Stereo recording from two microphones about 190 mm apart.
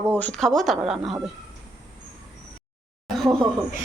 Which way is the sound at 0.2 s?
5° left (ahead or behind).